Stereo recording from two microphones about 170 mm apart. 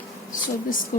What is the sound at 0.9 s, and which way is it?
Speech, 50° left (ahead or behind).